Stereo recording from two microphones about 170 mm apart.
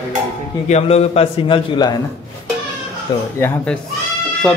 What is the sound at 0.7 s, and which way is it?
A man's voice, 40° left (ahead or behind).